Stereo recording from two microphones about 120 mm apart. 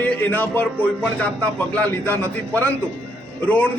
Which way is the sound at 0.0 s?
15° left (ahead or behind).